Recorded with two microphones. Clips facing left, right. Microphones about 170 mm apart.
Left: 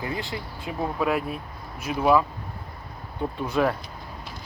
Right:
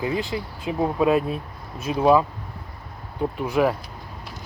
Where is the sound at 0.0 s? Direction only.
20° right (ahead or behind).